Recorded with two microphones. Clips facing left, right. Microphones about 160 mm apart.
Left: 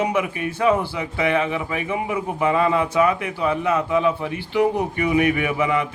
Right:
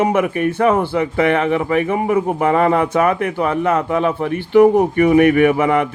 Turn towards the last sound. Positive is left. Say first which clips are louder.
# right 8 dB
turn(degrees=-55)  # may be behind; listen again after turning